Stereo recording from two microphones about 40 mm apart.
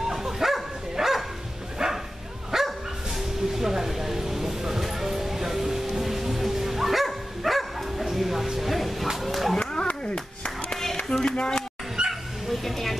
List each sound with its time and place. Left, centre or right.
0.1 s bow-wow: centre
0.9 s dog: centre
1.8 s bow-wow: centre
2.5 s dog: centre
3.2 s music: centre
7.1 s bow-wow: centre
9.2 s a sound: centre
9.6 s a sound: left
10.1 s clapping: centre
11.0 s a sound: centre
12.1 s dog: centre